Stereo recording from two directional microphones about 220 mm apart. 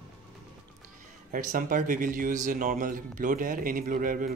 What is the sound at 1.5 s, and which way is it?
Speech, 40° right (ahead or behind).